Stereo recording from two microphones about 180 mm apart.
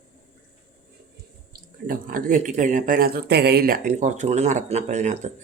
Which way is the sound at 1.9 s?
50° right (ahead or behind).